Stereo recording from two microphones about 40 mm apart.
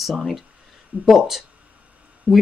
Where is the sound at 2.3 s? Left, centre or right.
Right.